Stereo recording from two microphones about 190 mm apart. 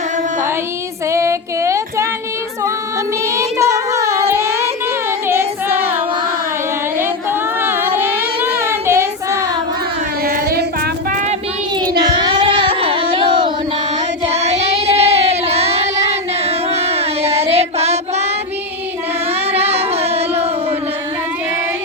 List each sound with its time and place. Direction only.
1.1 s a sound: 15° right (ahead or behind)
3.2 s child singing: 15° right (ahead or behind)
6.9 s a sound: 10° right (ahead or behind)
8.5 s child singing: 15° right (ahead or behind)
10.2 s child singing: 50° right (ahead or behind)
11.1 s child singing: 40° right (ahead or behind)
11.8 s child singing: 20° right (ahead or behind)
19.3 s female singing: 30° right (ahead or behind)
19.9 s singing: 30° right (ahead or behind)